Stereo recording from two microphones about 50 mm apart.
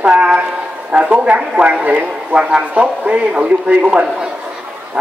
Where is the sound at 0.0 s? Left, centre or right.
Right.